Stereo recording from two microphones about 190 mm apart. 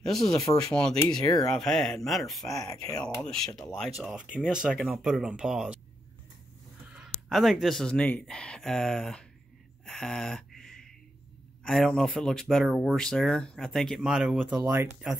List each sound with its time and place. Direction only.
0.0 s speech: centre (ahead or behind)
1.3 s speech: 20° left (ahead or behind)
1.6 s speech: centre (ahead or behind)
2.5 s speech: 20° left (ahead or behind)
3.0 s speech: 5° left (ahead or behind)
6.9 s speech: centre (ahead or behind)
9.8 s a sound: 5° left (ahead or behind)
11.6 s speech: 5° left (ahead or behind); by 15.0 s 15° right (ahead or behind)